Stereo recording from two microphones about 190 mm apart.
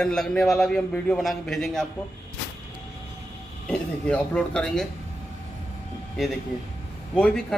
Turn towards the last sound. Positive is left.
turn(degrees=5)  # may be behind; listen again after turning